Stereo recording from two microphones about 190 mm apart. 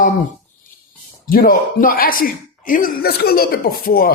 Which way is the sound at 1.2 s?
50° left (ahead or behind).